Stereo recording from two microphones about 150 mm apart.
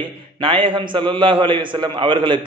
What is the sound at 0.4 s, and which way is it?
A man's voice, 35° right (ahead or behind).